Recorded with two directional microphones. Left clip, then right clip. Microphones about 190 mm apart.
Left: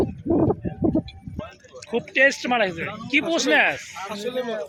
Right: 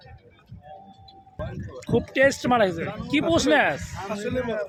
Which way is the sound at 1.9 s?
15° right (ahead or behind).